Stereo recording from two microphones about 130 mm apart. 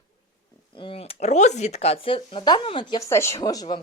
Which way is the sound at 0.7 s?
40° left (ahead or behind).